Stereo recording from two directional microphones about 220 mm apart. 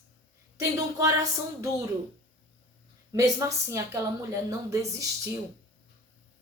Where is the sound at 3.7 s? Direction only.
15° right (ahead or behind).